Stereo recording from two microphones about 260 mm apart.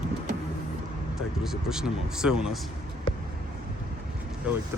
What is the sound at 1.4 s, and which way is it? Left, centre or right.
Speech, centre.